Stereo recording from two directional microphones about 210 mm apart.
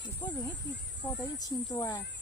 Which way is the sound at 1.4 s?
20° left (ahead or behind).